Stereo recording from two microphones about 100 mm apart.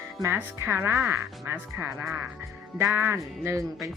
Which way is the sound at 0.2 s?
25° right (ahead or behind).